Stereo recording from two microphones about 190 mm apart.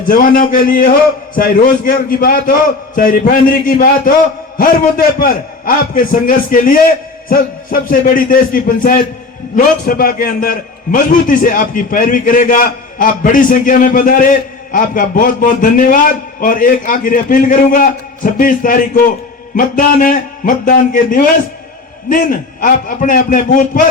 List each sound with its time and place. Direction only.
0.1 s a man's voice: 45° left (ahead or behind)